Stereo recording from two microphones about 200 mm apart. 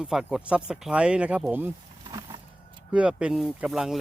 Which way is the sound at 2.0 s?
25° right (ahead or behind).